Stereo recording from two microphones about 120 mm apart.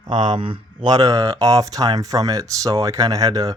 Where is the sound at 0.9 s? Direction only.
30° right (ahead or behind).